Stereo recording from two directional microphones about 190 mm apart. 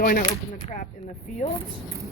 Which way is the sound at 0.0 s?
50° left (ahead or behind).